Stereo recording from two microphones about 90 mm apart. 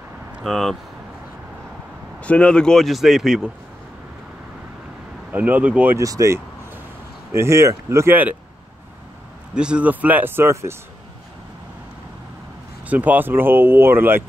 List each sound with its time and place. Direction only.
0.4 s speech: centre (ahead or behind)
2.2 s speech: 15° left (ahead or behind); by 3.5 s 5° right (ahead or behind)
5.3 s speech: 20° right (ahead or behind)
5.9 s speech: 35° right (ahead or behind)
8.1 s speech: 20° right (ahead or behind)
9.5 s speech: 10° right (ahead or behind); by 10.8 s 30° right (ahead or behind)
12.8 s speech: 15° right (ahead or behind)